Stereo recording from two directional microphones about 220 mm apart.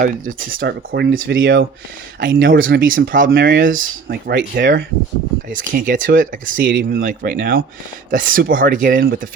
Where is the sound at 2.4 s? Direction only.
60° right (ahead or behind).